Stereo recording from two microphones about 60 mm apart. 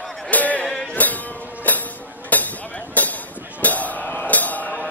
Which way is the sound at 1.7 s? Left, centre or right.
Left.